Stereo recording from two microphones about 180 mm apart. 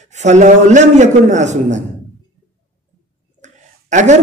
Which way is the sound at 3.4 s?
40° right (ahead or behind).